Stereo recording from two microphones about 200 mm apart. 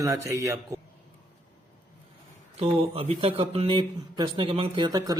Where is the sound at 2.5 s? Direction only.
30° right (ahead or behind).